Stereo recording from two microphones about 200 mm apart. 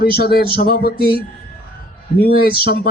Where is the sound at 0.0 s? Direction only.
50° left (ahead or behind).